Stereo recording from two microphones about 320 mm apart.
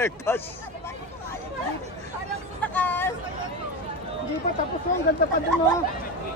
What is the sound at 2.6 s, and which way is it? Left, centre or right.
Vehicle, centre.